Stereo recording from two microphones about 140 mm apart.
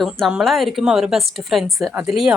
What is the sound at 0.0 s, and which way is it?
Speech, 5° right (ahead or behind).